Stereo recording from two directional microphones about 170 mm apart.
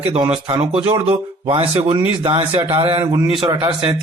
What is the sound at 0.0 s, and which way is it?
Speech, 30° right (ahead or behind).